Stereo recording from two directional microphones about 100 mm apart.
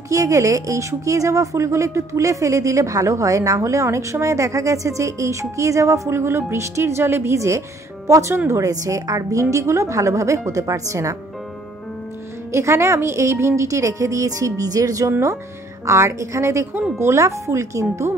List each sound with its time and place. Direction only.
0.1 s a woman's voice: 35° right (ahead or behind)
12.5 s a woman's voice: 25° right (ahead or behind)